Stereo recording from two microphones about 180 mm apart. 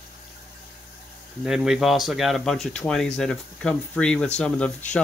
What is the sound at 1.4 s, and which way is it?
Speech, centre (ahead or behind).